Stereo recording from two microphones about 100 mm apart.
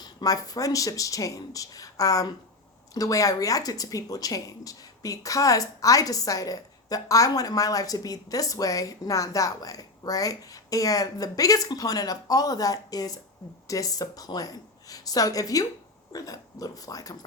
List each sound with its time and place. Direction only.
0.0 s speech: 40° left (ahead or behind)